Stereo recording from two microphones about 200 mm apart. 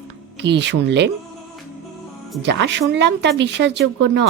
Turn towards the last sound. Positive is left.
turn(degrees=-60)  # may be behind; listen again after turning